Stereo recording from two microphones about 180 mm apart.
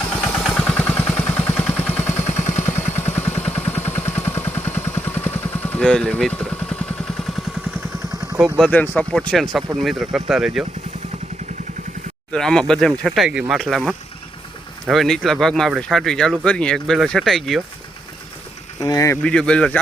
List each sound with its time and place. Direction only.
0.2 s vehicle: 5° left (ahead or behind)
8.6 s speech: 10° left (ahead or behind)
12.3 s speech: 5° left (ahead or behind)
18.8 s speech: 20° left (ahead or behind)
19.2 s speech: 5° left (ahead or behind)